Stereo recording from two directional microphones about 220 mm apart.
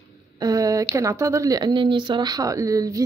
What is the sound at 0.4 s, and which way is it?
Speech, 15° right (ahead or behind).